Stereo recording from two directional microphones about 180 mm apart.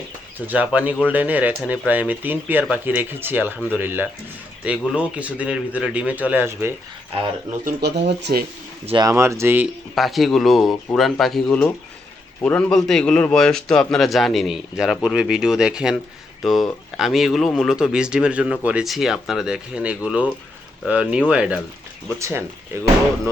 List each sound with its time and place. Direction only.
0.3 s speech: 10° right (ahead or behind)
7.6 s speech: 65° right (ahead or behind)
8.9 s speech: 20° right (ahead or behind)
9.9 s a man's voice: centre (ahead or behind)